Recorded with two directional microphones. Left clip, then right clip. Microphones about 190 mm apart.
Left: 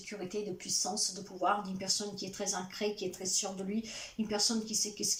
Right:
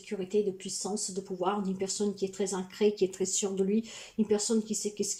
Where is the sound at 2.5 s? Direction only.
50° right (ahead or behind).